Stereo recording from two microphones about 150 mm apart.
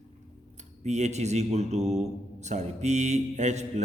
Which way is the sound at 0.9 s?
50° right (ahead or behind).